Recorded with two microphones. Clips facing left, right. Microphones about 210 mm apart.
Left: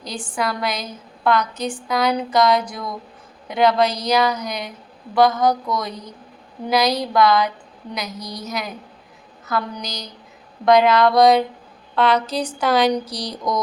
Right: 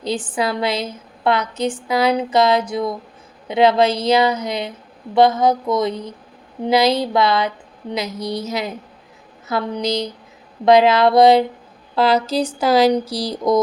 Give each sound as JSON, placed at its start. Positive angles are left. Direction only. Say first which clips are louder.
{"t": 0.3, "sound": "a woman's voice", "louder": "right 2 dB", "side_deg": -25}